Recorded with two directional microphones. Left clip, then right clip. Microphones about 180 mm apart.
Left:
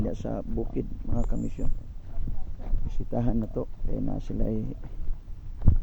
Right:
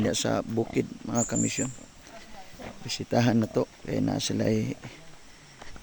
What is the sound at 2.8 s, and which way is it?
Speech, 25° right (ahead or behind).